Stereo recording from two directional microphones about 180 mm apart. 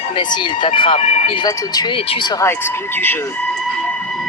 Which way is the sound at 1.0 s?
40° left (ahead or behind).